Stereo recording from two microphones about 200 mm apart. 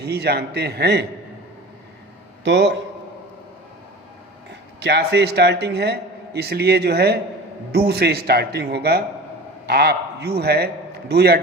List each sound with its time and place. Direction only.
0.0 s a man's voice: 55° right (ahead or behind)
2.4 s a man's voice: 60° right (ahead or behind)
4.8 s a man's voice: 55° right (ahead or behind)